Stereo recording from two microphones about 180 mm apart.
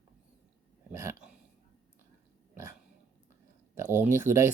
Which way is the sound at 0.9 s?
15° right (ahead or behind).